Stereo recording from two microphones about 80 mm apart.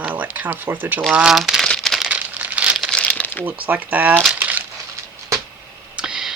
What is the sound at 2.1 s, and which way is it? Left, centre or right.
Crumpling, centre.